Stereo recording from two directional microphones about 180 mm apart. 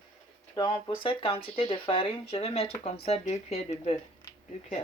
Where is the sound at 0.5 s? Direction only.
30° left (ahead or behind).